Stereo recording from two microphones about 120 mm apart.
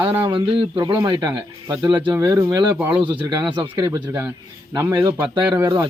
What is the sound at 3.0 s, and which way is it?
Speech, 40° right (ahead or behind).